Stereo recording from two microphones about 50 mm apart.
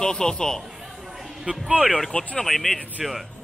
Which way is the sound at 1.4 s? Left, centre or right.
Right.